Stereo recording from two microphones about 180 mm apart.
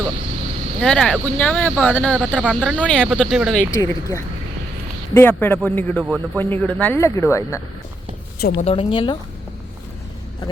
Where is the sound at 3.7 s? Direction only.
15° left (ahead or behind).